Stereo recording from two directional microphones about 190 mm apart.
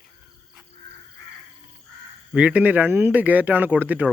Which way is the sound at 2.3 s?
5° right (ahead or behind).